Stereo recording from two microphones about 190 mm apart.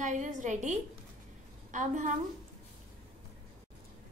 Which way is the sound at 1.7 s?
40° right (ahead or behind).